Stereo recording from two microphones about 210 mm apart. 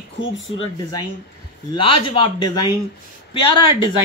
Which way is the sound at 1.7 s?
25° left (ahead or behind).